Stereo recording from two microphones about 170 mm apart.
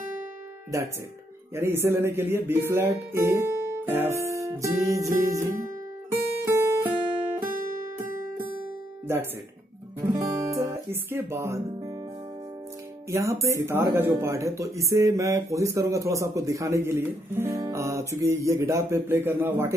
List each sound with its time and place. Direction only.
0.7 s speech: 20° right (ahead or behind)
6.4 s music: 15° right (ahead or behind)
9.0 s speech: 15° right (ahead or behind)
13.1 s speech: 20° right (ahead or behind)